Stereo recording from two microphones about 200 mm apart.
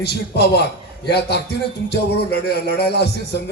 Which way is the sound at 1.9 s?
55° left (ahead or behind).